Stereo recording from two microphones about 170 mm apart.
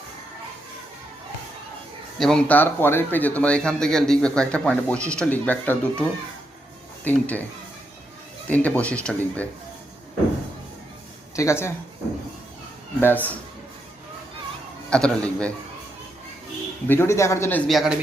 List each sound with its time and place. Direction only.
2.1 s speech: 5° left (ahead or behind)
8.4 s speech: 10° left (ahead or behind)
11.3 s speech: 15° left (ahead or behind)
13.0 s speech: 10° left (ahead or behind)
14.8 s a man's voice: 5° left (ahead or behind)
16.8 s speech: 15° left (ahead or behind)
17.7 s a man's voice: centre (ahead or behind)